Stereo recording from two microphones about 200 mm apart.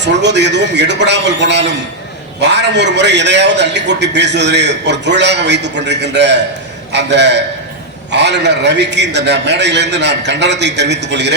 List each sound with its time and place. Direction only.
0.0 s a man's voice: 60° right (ahead or behind)